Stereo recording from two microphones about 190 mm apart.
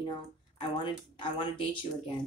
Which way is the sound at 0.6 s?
25° left (ahead or behind).